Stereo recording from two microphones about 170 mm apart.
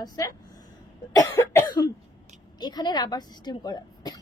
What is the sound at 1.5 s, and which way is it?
A woman's voice, 20° left (ahead or behind).